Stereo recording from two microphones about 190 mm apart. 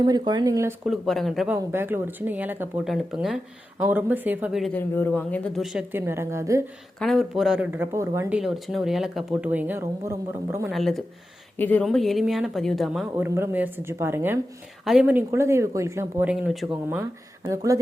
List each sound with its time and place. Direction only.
0.0 s speech: 20° right (ahead or behind)
0.9 s speech: centre (ahead or behind)
1.5 s speech: 10° right (ahead or behind)
4.7 s a man's voice: 10° left (ahead or behind)
5.6 s speech: 5° right (ahead or behind)
7.0 s speech: centre (ahead or behind)
8.4 s speech: centre (ahead or behind)
10.7 s speech: centre (ahead or behind)
13.1 s speech: 10° right (ahead or behind)